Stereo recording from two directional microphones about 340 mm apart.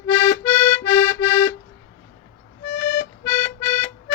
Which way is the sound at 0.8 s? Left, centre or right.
Left.